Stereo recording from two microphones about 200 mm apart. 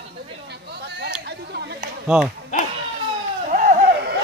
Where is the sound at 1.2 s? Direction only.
55° right (ahead or behind).